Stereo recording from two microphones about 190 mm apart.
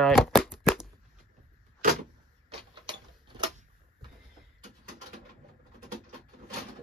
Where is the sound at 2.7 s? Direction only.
25° right (ahead or behind).